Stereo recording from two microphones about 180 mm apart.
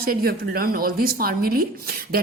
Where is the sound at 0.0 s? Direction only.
55° right (ahead or behind).